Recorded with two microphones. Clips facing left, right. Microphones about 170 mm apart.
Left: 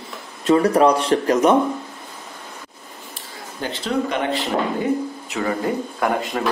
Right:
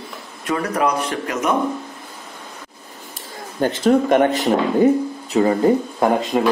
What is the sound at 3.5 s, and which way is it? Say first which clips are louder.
Speech: right 7 dB; 50° right (ahead or behind).